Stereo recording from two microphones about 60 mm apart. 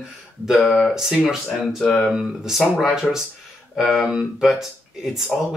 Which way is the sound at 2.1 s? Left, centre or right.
Centre.